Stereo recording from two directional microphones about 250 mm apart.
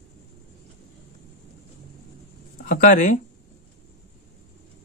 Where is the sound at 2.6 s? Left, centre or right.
Left.